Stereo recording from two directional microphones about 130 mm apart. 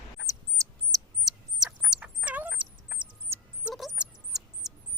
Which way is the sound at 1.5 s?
5° right (ahead or behind).